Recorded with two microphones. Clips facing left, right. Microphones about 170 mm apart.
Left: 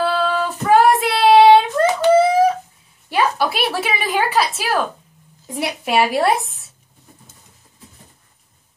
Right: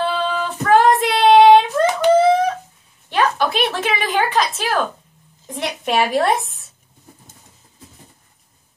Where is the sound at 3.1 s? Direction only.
10° left (ahead or behind).